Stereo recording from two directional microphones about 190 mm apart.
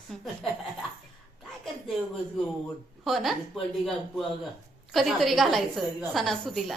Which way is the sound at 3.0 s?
Centre (ahead or behind).